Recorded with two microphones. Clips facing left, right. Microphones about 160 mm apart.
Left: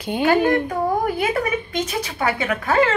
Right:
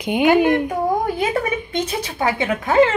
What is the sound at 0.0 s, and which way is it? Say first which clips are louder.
A woman's voice: right 3 dB; 15° right (ahead or behind).